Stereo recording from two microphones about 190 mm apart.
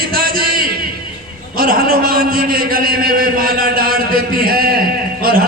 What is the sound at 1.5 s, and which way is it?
A man's voice, 50° right (ahead or behind).